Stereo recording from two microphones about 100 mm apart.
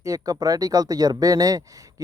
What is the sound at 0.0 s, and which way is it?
Speech, 35° right (ahead or behind).